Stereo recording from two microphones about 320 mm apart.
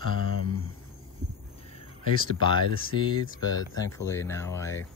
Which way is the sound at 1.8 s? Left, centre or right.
Centre.